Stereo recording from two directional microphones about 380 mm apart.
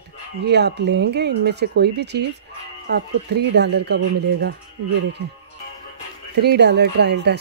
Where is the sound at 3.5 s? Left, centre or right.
Right.